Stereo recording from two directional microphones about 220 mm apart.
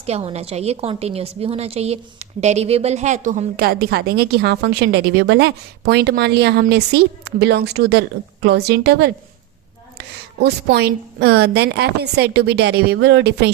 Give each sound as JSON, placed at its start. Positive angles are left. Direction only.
{"t": 0.0, "sound": "a woman's voice", "side_deg": -25}
{"t": 10.8, "sound": "a woman's voice", "side_deg": -50}